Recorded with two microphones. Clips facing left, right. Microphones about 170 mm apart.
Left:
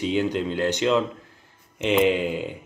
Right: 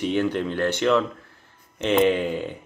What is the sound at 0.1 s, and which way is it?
Speech, 15° left (ahead or behind).